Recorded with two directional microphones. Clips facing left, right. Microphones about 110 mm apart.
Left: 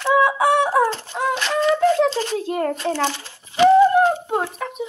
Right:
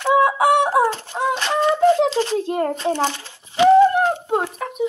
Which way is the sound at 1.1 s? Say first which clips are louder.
Right 1 dB; 20° right (ahead or behind).